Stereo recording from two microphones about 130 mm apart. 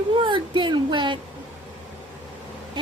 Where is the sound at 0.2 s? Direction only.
40° right (ahead or behind).